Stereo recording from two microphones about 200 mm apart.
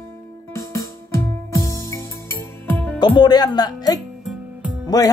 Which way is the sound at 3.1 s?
20° left (ahead or behind).